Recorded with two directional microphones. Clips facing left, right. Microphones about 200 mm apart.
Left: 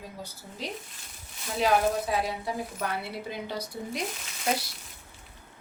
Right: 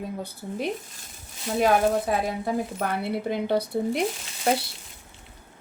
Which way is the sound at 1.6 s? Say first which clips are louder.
Right 3 dB; 50° right (ahead or behind).